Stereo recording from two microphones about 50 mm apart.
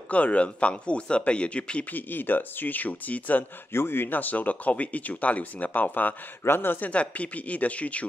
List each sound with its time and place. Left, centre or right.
0.1 s speech: left
1.9 s speech: left
3.7 s speech: left
6.9 s speech: left